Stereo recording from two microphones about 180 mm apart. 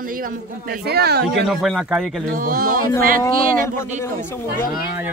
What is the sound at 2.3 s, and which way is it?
Speech, 50° right (ahead or behind).